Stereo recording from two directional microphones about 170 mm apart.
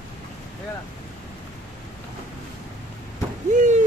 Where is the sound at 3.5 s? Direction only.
50° right (ahead or behind).